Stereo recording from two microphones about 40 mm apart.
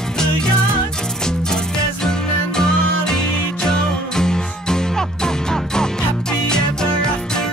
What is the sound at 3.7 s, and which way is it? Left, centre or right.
Music, centre.